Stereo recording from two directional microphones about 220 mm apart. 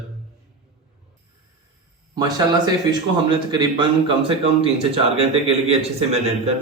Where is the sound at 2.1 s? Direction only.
15° right (ahead or behind).